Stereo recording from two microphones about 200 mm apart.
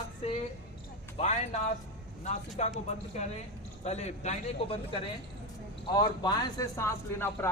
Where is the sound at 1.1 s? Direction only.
35° left (ahead or behind).